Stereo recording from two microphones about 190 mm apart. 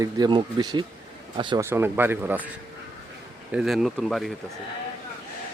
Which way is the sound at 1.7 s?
10° right (ahead or behind).